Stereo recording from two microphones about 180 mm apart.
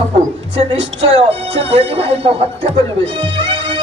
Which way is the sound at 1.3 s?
35° right (ahead or behind).